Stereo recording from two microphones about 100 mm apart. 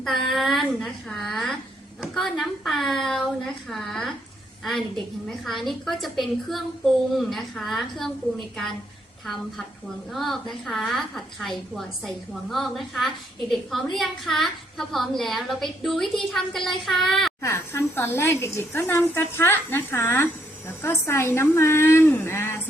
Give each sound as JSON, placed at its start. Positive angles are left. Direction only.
{"t": 0.0, "sound": "a woman's voice", "side_deg": 5}
{"t": 9.2, "sound": "a woman's voice", "side_deg": 0}
{"t": 17.4, "sound": "a woman's voice", "side_deg": 25}